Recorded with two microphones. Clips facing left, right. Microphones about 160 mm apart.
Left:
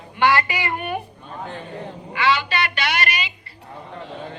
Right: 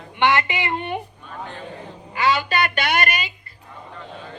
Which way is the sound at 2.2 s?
40° right (ahead or behind).